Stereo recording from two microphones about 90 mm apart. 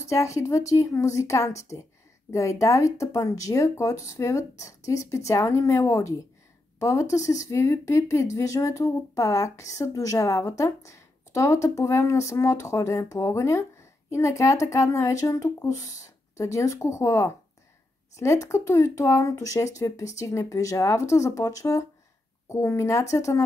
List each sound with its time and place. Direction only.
0.0 s speech: 35° left (ahead or behind)